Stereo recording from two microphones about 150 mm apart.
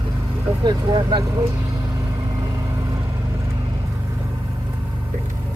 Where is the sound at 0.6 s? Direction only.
30° right (ahead or behind).